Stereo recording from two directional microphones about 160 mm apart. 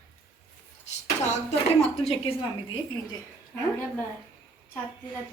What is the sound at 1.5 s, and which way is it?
Speech, 40° left (ahead or behind).